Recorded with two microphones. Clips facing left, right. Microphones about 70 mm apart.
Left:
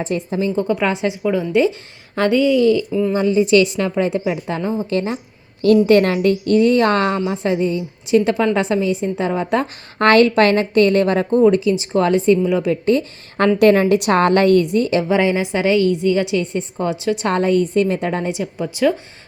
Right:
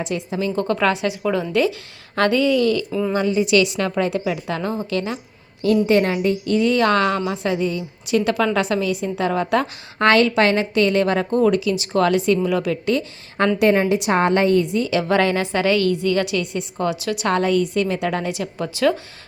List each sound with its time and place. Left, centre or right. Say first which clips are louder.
0.0 s a woman's voice: left 3 dB; left
0.5 s a woman's voice: right 1 dB; centre
1.2 s a woman's voice: left 3 dB; centre
2.1 s a woman's voice: left 2 dB; left
5.6 s a woman's voice: left 4 dB; left
10.0 s a woman's voice: left 3 dB; left
11.3 s a woman's voice: left 4 dB; left
12.7 s a woman's voice: left 4 dB; left
13.6 s a woman's voice: left 5 dB; left
15.1 s a woman's voice: right 1 dB; centre